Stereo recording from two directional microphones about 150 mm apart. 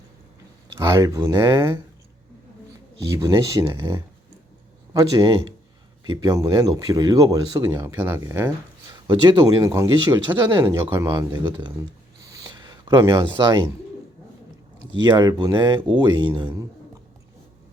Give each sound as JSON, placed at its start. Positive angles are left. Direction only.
{"t": 0.8, "sound": "speech", "side_deg": -25}
{"t": 3.0, "sound": "speech", "side_deg": -25}
{"t": 11.8, "sound": "a sound", "side_deg": -20}
{"t": 15.0, "sound": "speech", "side_deg": -25}